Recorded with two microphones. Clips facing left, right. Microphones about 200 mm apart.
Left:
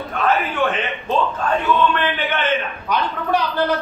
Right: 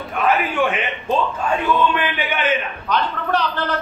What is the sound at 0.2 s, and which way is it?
Speech, 15° right (ahead or behind).